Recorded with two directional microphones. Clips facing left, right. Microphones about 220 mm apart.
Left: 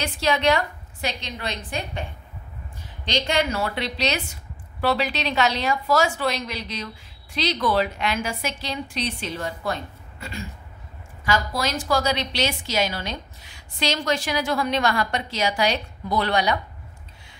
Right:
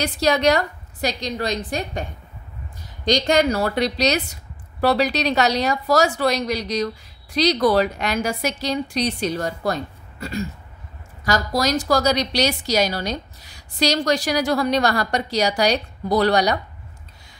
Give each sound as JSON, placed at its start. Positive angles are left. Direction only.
{"t": 0.0, "sound": "a woman's voice", "side_deg": -40}
{"t": 3.1, "sound": "a woman's voice", "side_deg": -40}
{"t": 11.2, "sound": "a woman's voice", "side_deg": -40}